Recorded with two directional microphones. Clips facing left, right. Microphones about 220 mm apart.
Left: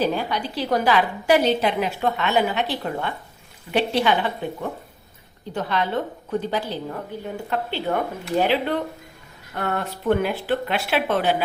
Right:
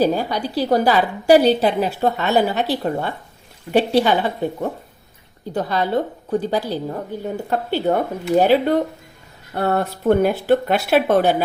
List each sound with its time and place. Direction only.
0.0 s a woman's voice: 40° right (ahead or behind)